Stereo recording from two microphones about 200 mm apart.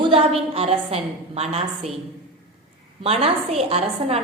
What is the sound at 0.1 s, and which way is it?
A woman's voice, 30° right (ahead or behind).